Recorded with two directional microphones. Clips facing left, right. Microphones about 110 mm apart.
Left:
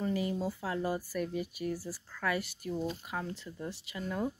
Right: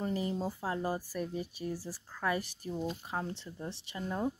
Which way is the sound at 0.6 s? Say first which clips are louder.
Left 1 dB; 25° right (ahead or behind).